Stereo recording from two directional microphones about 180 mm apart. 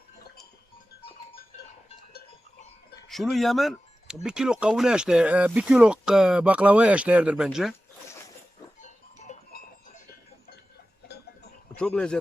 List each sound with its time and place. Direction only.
3.1 s speech: centre (ahead or behind)
8.8 s music: 40° left (ahead or behind)
11.8 s speech: 5° left (ahead or behind)